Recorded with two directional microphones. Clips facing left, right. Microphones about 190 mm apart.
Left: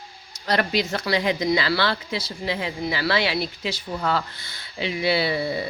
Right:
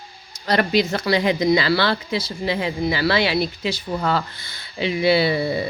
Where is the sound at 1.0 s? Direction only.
20° right (ahead or behind).